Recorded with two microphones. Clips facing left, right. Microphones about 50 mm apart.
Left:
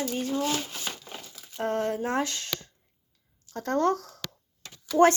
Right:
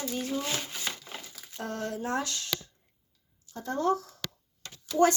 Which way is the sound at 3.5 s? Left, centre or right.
Left.